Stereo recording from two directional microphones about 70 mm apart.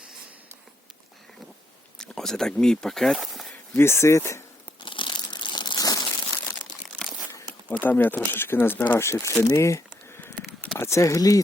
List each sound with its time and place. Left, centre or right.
2.0 s speech: centre
3.8 s speech: left
5.1 s crumpling: left
7.8 s speech: left
9.0 s speech: left